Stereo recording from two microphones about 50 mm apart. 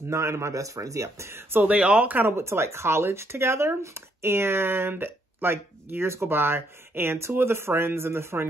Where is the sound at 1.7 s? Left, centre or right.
Right.